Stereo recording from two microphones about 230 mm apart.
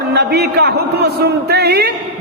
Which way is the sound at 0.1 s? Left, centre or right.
Right.